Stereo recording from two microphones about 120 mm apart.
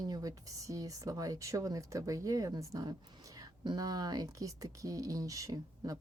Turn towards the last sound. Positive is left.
turn(degrees=-30)  # may be behind; listen again after turning